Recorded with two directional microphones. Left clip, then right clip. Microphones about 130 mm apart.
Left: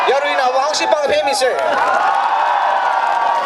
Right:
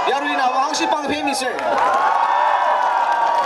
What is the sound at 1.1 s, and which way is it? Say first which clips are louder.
Speech: left 6 dB; 20° left (ahead or behind).